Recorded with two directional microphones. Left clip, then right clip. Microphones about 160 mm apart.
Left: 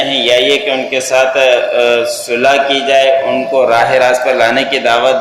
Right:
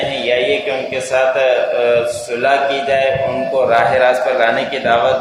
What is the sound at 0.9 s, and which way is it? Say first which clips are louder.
A man's voice: left 3 dB; 30° left (ahead or behind).